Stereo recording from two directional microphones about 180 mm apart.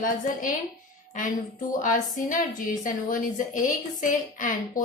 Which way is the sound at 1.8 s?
45° left (ahead or behind).